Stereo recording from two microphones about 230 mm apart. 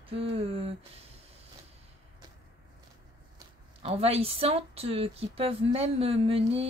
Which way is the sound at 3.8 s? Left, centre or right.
Right.